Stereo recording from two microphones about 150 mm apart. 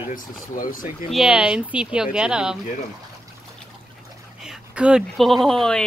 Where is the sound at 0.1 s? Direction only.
65° left (ahead or behind).